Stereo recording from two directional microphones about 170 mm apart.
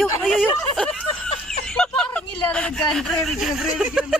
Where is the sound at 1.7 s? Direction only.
5° left (ahead or behind).